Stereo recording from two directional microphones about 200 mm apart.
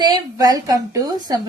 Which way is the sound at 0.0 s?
20° right (ahead or behind).